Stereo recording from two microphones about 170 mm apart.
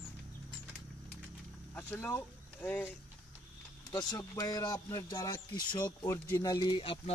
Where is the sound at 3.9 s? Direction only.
20° left (ahead or behind).